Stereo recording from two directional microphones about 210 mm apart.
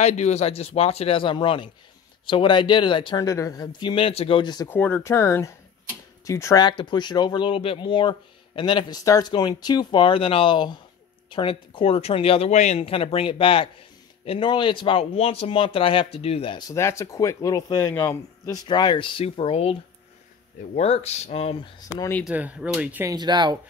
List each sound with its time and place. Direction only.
0.0 s speech: 30° left (ahead or behind)
4.7 s speech: 10° left (ahead or behind)
22.2 s speech: 5° right (ahead or behind)
23.1 s speech: 20° right (ahead or behind)